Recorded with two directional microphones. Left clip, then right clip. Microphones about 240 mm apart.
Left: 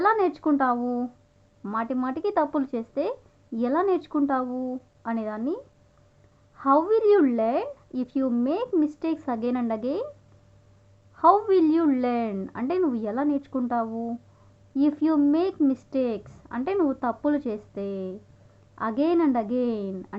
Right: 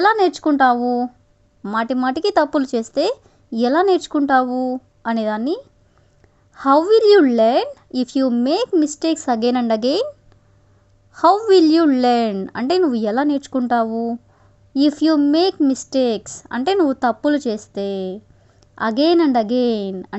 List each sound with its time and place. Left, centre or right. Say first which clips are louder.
0.0 s speech: right 7 dB; right
11.1 s speech: right 6 dB; right